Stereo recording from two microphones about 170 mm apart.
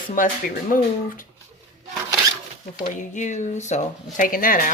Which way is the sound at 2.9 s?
45° left (ahead or behind).